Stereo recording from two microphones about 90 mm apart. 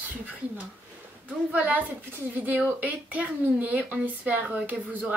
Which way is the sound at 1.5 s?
20° right (ahead or behind).